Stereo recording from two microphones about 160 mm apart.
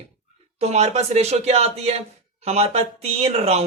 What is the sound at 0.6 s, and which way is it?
Speech, 45° right (ahead or behind).